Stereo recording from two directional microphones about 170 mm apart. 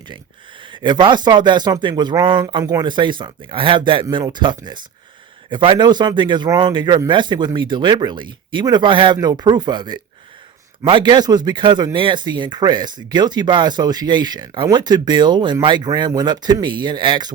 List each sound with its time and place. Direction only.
0.7 s speech: 25° right (ahead or behind)